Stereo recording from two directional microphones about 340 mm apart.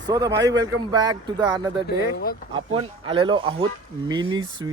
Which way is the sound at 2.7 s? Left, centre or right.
Centre.